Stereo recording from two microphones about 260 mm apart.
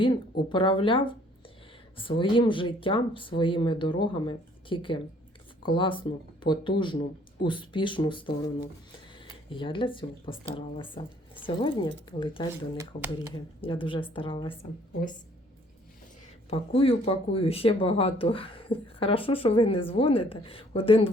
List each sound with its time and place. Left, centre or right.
0.5 s speech: centre
9.5 s speech: centre
12.7 s speech: centre
13.3 s speech: centre
16.5 s speech: left